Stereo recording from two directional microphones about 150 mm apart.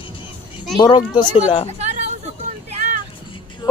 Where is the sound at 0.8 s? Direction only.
30° left (ahead or behind).